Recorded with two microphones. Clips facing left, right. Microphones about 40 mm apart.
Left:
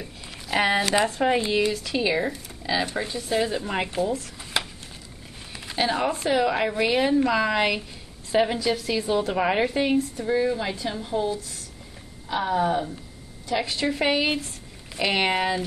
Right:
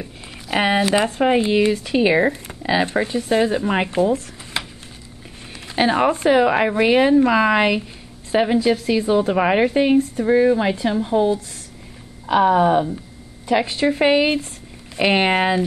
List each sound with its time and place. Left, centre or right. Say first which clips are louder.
0.0 s a sound: right 4 dB; centre
0.7 s speech: right 5 dB; centre
1.0 s speech: right 4 dB; right
1.3 s speech: right 6 dB; centre
1.6 s speech: right 7 dB; right
5.8 s a woman's voice: right 7 dB; right
9.9 s speech: right 7 dB; right